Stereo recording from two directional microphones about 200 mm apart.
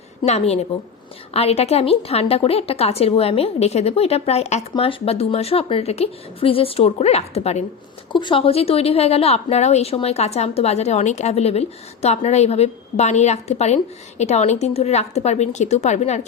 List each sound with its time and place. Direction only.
0.3 s a woman's voice: 30° left (ahead or behind)